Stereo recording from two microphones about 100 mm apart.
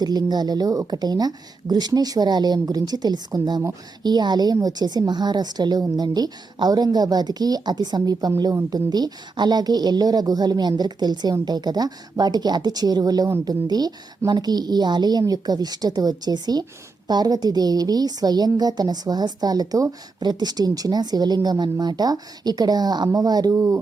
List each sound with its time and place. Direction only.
0.0 s a woman's voice: 40° right (ahead or behind)
23.6 s speech: 25° right (ahead or behind)